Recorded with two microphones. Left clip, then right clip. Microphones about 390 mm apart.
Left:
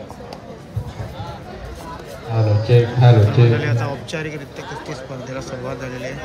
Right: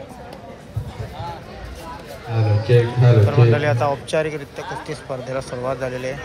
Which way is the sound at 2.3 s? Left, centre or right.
Left.